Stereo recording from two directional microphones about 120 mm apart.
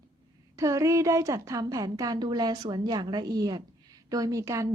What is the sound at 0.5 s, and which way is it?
A woman's voice, 25° right (ahead or behind).